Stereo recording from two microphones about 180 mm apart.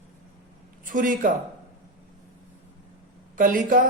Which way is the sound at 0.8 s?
50° right (ahead or behind).